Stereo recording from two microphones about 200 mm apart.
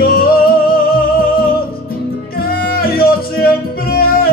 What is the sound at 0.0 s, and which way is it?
Music, 50° left (ahead or behind).